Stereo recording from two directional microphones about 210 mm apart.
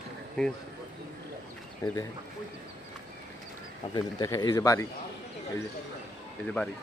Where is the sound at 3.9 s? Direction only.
20° left (ahead or behind).